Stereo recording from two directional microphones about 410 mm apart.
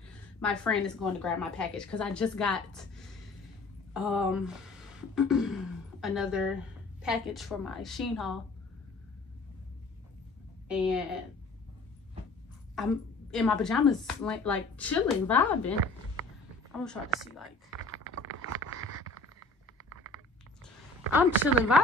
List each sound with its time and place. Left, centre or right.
0.4 s a woman's voice: centre
3.9 s a woman's voice: centre
10.7 s a woman's voice: centre
12.8 s a woman's voice: centre
16.8 s a woman's voice: centre
17.7 s typing: right
21.1 s a woman's voice: centre